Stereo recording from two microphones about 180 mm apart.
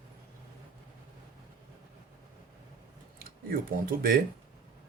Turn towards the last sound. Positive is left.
turn(degrees=-55)  # may be behind; listen again after turning